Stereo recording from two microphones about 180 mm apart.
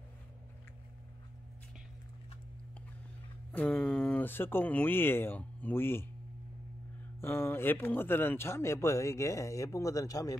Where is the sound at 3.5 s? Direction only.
10° left (ahead or behind).